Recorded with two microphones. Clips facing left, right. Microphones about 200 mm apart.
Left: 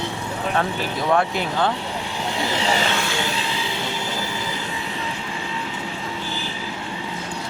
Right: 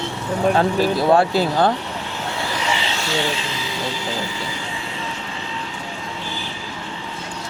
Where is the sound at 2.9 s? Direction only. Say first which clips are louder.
Left 1 dB; 55° left (ahead or behind).